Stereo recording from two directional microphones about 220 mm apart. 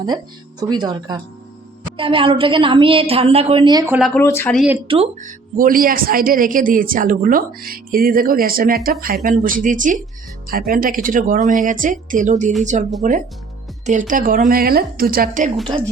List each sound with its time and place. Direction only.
0.6 s a woman's voice: 20° right (ahead or behind)
3.9 s speech: centre (ahead or behind)
4.2 s speech: 10° left (ahead or behind)
4.9 s a woman's voice: 25° right (ahead or behind)
5.5 s a woman's voice: 40° right (ahead or behind)